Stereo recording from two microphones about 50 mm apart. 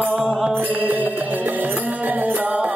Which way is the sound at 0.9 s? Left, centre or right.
Right.